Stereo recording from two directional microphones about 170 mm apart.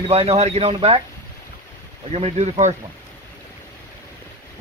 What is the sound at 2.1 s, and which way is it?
Speech, 40° right (ahead or behind).